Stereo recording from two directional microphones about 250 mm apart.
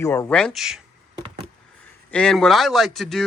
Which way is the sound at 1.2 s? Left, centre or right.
Right.